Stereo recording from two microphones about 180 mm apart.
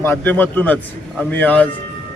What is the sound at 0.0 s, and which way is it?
A man's voice, 10° left (ahead or behind).